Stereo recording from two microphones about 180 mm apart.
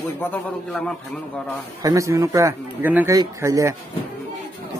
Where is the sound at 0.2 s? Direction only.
5° left (ahead or behind).